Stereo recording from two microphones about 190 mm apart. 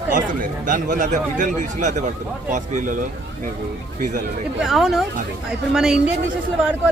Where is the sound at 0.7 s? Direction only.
45° right (ahead or behind).